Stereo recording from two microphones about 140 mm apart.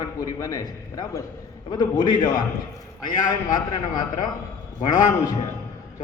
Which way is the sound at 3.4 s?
30° left (ahead or behind).